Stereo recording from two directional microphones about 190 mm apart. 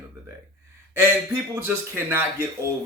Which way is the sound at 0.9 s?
15° right (ahead or behind).